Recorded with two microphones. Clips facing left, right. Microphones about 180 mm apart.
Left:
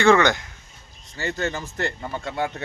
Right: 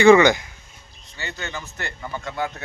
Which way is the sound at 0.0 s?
15° right (ahead or behind).